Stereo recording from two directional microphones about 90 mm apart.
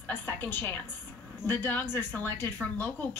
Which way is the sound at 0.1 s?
20° left (ahead or behind).